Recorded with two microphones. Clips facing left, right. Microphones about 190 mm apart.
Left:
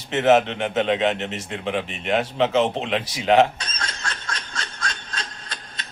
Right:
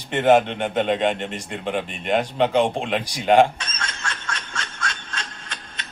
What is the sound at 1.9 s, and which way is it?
A man's voice, 5° left (ahead or behind).